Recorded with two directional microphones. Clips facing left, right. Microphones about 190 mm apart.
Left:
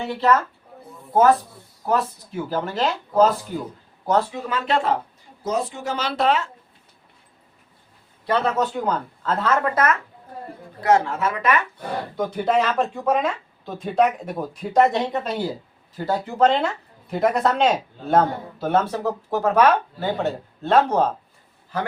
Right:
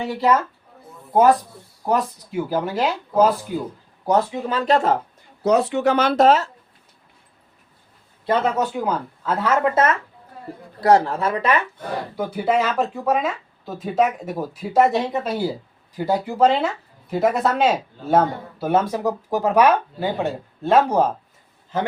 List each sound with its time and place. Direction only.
0.1 s speech: 10° right (ahead or behind)
4.4 s speech: 35° right (ahead or behind)
5.4 s speech: 70° right (ahead or behind); by 6.5 s 40° right (ahead or behind)
8.3 s speech: 10° right (ahead or behind)
9.7 s speech: 25° right (ahead or behind)
12.1 s speech: 10° right (ahead or behind)
21.7 s speech: 20° right (ahead or behind)